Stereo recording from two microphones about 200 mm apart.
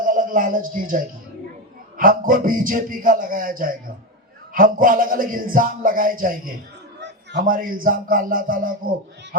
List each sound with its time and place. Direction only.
0.0 s a man's voice: 45° right (ahead or behind)